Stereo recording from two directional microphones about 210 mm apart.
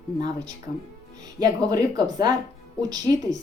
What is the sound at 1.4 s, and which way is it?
A woman's voice, 15° right (ahead or behind).